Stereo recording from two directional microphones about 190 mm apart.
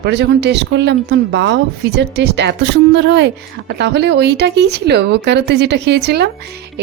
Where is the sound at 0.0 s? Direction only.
65° right (ahead or behind).